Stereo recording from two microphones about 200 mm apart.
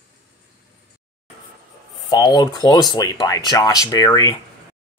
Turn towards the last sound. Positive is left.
turn(degrees=20)  # may be behind; listen again after turning